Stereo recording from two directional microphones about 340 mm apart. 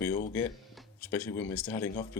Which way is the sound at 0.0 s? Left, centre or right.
Centre.